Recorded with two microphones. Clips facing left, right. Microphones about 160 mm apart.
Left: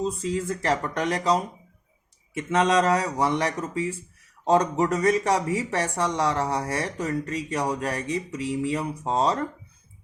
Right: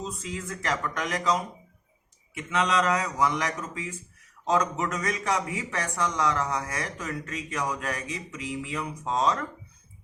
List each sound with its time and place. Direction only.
0.0 s speech: 35° left (ahead or behind)
2.5 s speech: 40° left (ahead or behind)